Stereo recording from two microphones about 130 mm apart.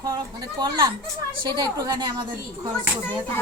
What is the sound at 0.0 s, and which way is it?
Speech, 30° right (ahead or behind).